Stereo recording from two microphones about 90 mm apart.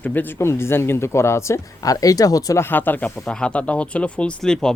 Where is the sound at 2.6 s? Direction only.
20° left (ahead or behind).